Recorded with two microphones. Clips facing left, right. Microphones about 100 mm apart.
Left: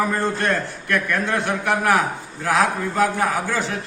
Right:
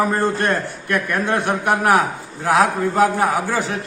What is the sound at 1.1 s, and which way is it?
Speech, 45° right (ahead or behind).